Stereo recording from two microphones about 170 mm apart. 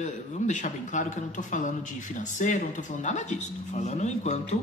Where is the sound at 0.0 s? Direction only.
45° left (ahead or behind).